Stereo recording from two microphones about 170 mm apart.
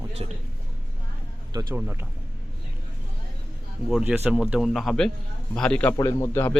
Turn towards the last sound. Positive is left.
turn(degrees=15)  # may be behind; listen again after turning